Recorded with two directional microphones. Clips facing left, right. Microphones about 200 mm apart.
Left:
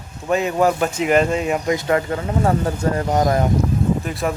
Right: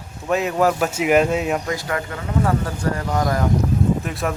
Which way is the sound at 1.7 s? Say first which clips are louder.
Left 6 dB; 25° left (ahead or behind).